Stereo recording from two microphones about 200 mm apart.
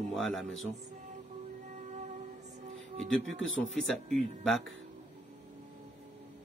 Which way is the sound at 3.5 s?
75° left (ahead or behind).